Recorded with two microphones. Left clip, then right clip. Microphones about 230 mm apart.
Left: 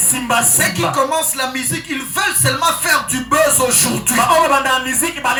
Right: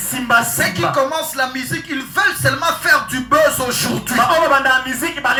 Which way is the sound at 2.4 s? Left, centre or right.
Left.